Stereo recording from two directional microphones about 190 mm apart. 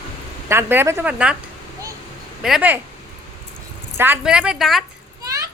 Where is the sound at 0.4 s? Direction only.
10° right (ahead or behind).